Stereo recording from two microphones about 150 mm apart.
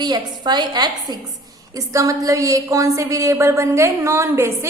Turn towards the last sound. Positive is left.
turn(degrees=-20)  # may be behind; listen again after turning